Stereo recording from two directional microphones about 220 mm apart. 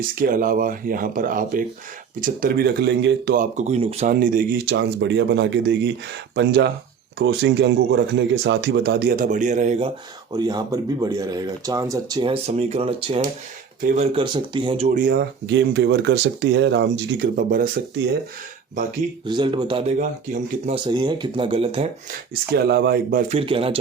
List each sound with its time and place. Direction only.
0.2 s speech: 40° right (ahead or behind)
3.3 s speech: 35° right (ahead or behind)
4.1 s speech: 40° right (ahead or behind)
10.3 s speech: 20° right (ahead or behind)
14.8 s speech: 40° right (ahead or behind)
19.2 s speech: 20° right (ahead or behind)
20.0 s speech: 35° right (ahead or behind)
20.8 s speech: 20° right (ahead or behind)
22.5 s speech: 45° right (ahead or behind)
23.3 s speech: 25° right (ahead or behind)